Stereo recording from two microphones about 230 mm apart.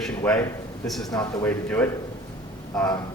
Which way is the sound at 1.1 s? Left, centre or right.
Centre.